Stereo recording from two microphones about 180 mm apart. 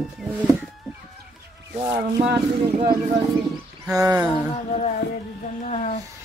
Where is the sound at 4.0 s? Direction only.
10° right (ahead or behind).